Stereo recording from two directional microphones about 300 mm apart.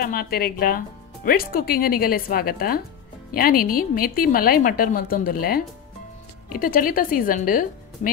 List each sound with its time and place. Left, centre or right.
0.0 s speech: left